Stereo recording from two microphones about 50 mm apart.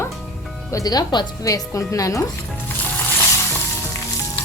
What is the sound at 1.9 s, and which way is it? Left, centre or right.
Speech, left.